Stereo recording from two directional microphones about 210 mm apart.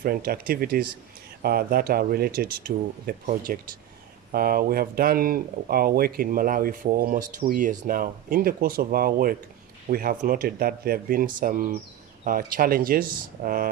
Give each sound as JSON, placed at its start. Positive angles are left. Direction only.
{"t": 0.0, "sound": "speech", "side_deg": -45}